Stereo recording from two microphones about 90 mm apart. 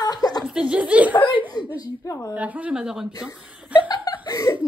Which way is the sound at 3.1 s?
40° left (ahead or behind).